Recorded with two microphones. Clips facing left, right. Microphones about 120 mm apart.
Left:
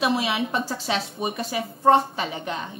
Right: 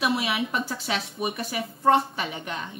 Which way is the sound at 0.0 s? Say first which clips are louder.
Left 2 dB; 30° left (ahead or behind).